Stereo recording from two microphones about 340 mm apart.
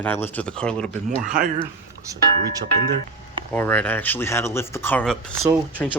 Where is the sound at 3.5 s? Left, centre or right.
Centre.